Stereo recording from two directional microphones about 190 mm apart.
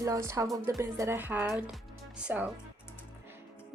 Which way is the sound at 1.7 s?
5° right (ahead or behind).